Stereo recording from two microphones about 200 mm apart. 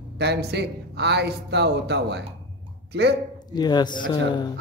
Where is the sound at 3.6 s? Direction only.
20° left (ahead or behind).